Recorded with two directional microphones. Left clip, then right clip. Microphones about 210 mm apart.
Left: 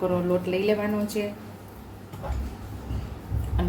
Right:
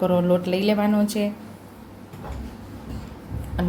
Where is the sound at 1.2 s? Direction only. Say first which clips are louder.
Right 3 dB; 45° right (ahead or behind).